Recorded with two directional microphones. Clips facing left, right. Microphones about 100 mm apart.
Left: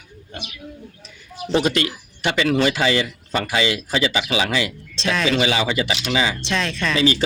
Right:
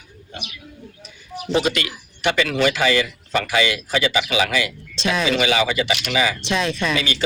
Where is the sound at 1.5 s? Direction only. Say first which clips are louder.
Left 2 dB; 35° left (ahead or behind).